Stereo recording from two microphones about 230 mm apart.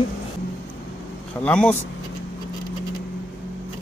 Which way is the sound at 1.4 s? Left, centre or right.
Centre.